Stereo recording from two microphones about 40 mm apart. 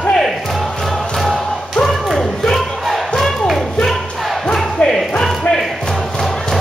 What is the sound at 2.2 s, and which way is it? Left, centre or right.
Music, centre.